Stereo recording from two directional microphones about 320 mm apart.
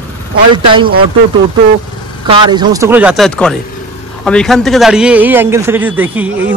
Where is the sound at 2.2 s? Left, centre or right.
Centre.